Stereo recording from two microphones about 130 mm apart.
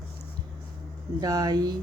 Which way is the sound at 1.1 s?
30° right (ahead or behind).